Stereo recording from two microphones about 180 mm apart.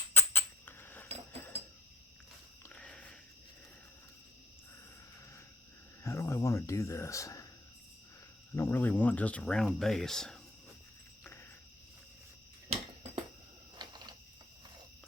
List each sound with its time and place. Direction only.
0.1 s rodents: 10° left (ahead or behind)
2.7 s a sound: 5° left (ahead or behind)
6.0 s speech: 15° left (ahead or behind)
8.5 s speech: 15° left (ahead or behind)
11.2 s cricket: 15° left (ahead or behind)
12.6 s a sound: 30° right (ahead or behind)